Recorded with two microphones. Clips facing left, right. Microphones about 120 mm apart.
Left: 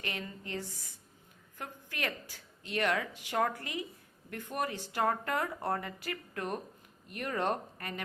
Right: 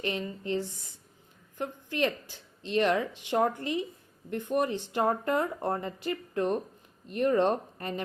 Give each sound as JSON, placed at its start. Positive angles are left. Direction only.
{"t": 0.0, "sound": "a woman's voice", "side_deg": -25}